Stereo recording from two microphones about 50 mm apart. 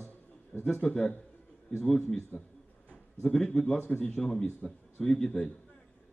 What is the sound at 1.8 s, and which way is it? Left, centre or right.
A man's voice, centre.